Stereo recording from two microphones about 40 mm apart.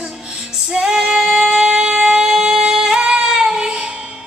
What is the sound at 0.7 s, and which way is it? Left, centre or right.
Singing, centre.